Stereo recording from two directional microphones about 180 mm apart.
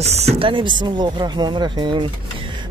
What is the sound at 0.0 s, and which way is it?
Speech, 35° right (ahead or behind).